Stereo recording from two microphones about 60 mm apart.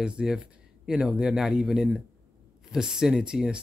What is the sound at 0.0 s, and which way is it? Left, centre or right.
Speech, centre.